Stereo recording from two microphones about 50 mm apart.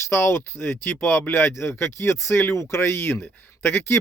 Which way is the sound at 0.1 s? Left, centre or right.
Left.